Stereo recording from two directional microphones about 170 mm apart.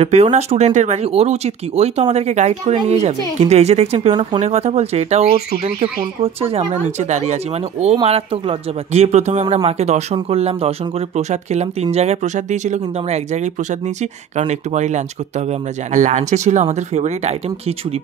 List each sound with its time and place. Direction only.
0.0 s speech: 40° right (ahead or behind)
14.5 s speech: 45° right (ahead or behind)